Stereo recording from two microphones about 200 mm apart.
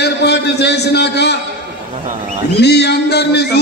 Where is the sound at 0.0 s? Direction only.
55° left (ahead or behind).